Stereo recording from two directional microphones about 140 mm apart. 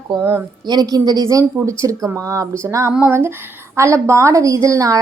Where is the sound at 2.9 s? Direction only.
15° right (ahead or behind).